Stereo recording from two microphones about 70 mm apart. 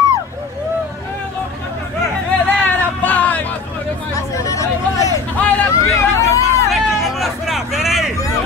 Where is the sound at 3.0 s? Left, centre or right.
Left.